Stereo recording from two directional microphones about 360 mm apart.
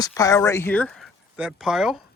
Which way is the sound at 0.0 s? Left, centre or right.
Centre.